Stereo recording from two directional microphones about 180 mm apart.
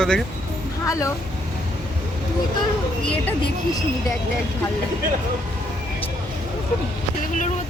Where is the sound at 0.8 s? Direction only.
20° left (ahead or behind).